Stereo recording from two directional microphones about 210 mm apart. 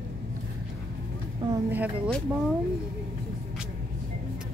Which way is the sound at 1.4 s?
25° right (ahead or behind).